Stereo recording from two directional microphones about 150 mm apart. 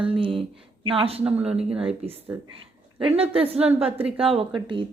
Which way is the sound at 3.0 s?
40° right (ahead or behind).